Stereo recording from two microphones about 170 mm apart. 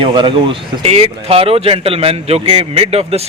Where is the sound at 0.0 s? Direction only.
30° right (ahead or behind).